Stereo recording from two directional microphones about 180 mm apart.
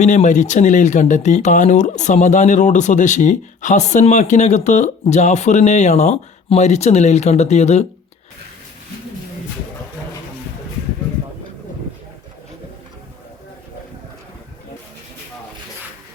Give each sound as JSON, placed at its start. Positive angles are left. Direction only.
{"t": 0.0, "sound": "speech", "side_deg": 40}